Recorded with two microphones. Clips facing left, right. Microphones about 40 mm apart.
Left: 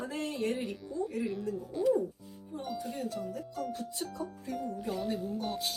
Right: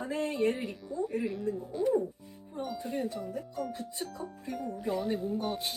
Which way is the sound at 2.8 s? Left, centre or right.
Right.